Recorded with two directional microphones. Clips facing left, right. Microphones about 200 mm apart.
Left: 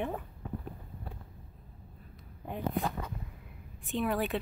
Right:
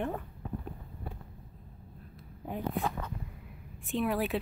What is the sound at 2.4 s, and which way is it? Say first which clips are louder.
Speech: even; centre (ahead or behind).